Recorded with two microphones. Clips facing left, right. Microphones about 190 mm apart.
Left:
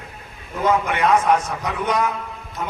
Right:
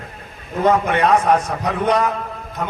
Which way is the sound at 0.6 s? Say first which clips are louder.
Right 3 dB; 40° right (ahead or behind).